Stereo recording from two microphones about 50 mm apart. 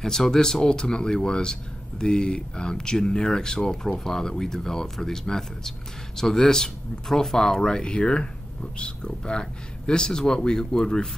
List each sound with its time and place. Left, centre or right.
0.0 s speech: centre